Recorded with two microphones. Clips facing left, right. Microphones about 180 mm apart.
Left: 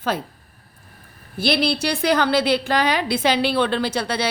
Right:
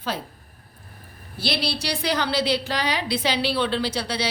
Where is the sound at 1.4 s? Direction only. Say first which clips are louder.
Left 7 dB; 55° left (ahead or behind).